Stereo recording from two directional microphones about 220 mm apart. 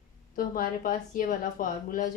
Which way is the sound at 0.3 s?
40° left (ahead or behind).